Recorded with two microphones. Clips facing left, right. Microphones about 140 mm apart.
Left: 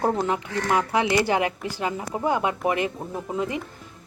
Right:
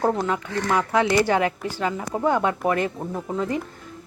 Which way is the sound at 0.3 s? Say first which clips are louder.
Even; 20° left (ahead or behind).